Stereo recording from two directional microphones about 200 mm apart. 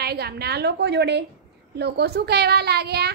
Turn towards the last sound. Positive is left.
turn(degrees=-55)  # may be behind; listen again after turning